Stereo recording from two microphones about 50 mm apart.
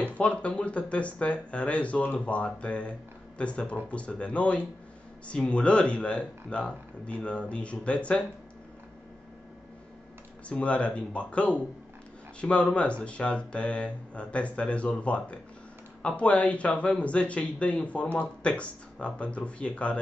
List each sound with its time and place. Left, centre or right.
0.0 s speech: left
10.5 s speech: left